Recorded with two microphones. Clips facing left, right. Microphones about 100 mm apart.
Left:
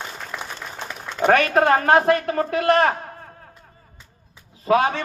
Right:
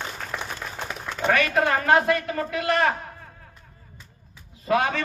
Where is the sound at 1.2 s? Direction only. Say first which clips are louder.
Left 5 dB; 40° left (ahead or behind).